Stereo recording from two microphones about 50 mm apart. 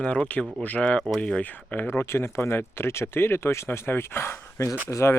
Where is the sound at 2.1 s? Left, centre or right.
Left.